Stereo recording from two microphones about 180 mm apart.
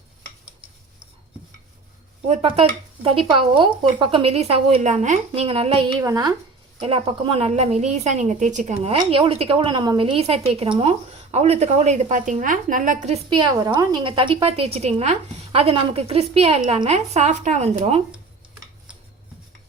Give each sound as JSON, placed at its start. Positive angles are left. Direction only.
{"t": 2.2, "sound": "speech", "side_deg": -35}
{"t": 6.0, "sound": "speech", "side_deg": -20}
{"t": 6.8, "sound": "speech", "side_deg": -30}
{"t": 13.3, "sound": "speech", "side_deg": -25}